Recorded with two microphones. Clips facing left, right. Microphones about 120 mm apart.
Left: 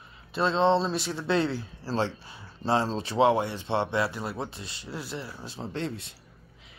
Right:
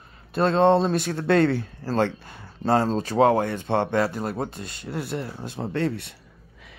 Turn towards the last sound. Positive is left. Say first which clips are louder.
# right 7 dB
turn(degrees=-65)  # may be behind; listen again after turning